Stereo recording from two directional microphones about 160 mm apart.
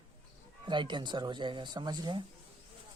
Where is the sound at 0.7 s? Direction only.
30° right (ahead or behind).